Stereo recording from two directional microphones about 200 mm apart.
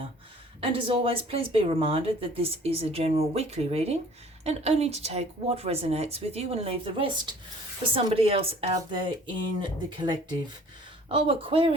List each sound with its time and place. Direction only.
0.6 s a woman's voice: 25° right (ahead or behind)